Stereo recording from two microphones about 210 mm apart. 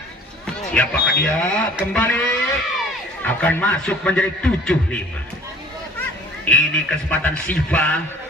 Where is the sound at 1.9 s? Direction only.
5° left (ahead or behind).